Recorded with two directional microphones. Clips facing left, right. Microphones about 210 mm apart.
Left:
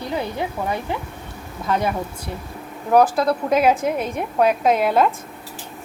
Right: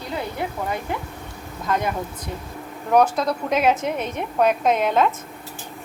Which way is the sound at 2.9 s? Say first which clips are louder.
Left 2 dB; 5° left (ahead or behind).